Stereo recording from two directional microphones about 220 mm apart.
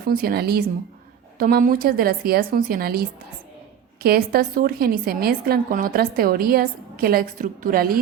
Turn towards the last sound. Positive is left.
turn(degrees=-40)  # may be behind; listen again after turning